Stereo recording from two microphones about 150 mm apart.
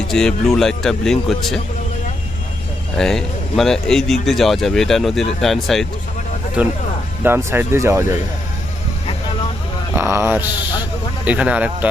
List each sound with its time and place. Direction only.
0.1 s speech: 5° left (ahead or behind)
3.0 s speech: 5° left (ahead or behind)
6.6 s speech: 10° right (ahead or behind)
9.9 s speech: 15° right (ahead or behind)